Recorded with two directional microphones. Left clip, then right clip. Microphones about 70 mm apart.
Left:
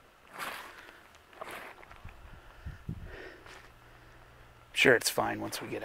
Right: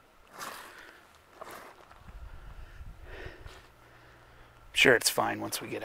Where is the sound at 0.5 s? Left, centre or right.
Right.